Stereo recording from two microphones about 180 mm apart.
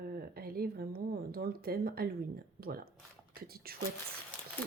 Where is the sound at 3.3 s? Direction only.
55° right (ahead or behind).